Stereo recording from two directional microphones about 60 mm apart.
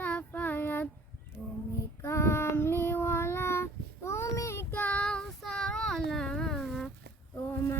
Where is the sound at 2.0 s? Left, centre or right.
Left.